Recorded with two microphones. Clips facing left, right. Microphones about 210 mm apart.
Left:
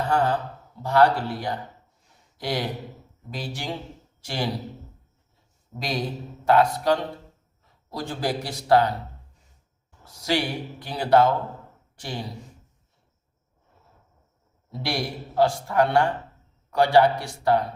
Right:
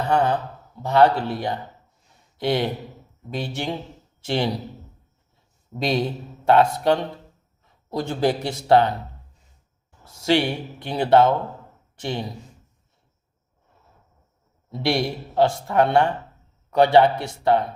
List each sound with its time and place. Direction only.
0.1 s speech: 20° right (ahead or behind)
5.8 s speech: 25° right (ahead or behind)
10.0 s speech: 25° right (ahead or behind)
14.7 s speech: 25° right (ahead or behind)